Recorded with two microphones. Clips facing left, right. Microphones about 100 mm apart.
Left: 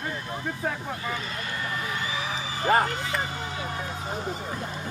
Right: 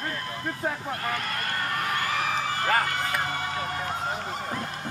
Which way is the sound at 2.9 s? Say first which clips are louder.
Right 2 dB; 55° right (ahead or behind).